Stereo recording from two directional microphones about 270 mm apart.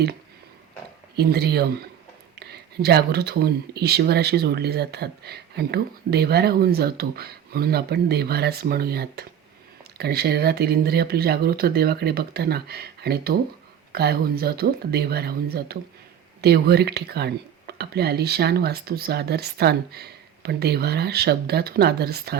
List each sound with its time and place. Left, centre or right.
1.1 s speech: right